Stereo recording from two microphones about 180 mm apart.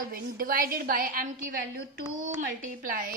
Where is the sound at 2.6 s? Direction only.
50° right (ahead or behind).